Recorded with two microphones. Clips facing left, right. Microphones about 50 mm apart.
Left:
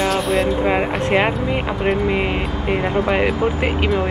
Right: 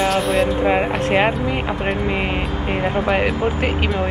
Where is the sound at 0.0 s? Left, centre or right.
Centre.